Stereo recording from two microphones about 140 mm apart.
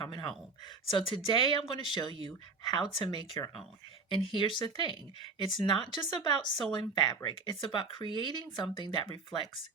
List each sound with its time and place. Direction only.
0.0 s speech: 30° left (ahead or behind)